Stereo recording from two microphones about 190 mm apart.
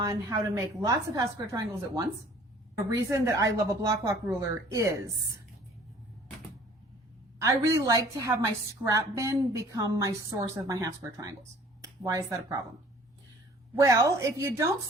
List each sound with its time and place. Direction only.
0.0 s a woman's voice: 15° right (ahead or behind)
7.4 s a woman's voice: 15° right (ahead or behind)
13.8 s a woman's voice: 15° right (ahead or behind)